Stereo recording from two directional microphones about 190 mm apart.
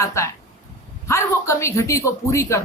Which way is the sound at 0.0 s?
15° left (ahead or behind).